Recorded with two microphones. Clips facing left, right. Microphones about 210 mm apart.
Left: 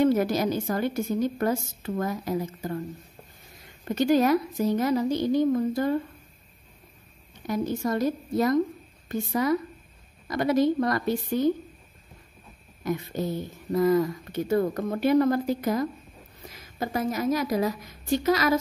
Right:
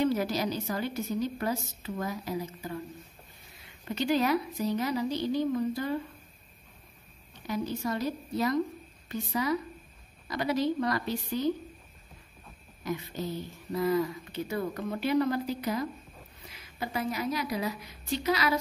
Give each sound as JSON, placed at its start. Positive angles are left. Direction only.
{"t": 0.0, "sound": "speech", "side_deg": 50}
{"t": 7.4, "sound": "speech", "side_deg": 50}
{"t": 12.8, "sound": "speech", "side_deg": 50}